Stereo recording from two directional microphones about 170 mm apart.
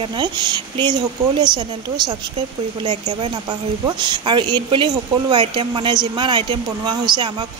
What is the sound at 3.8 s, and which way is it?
Speech, 25° right (ahead or behind).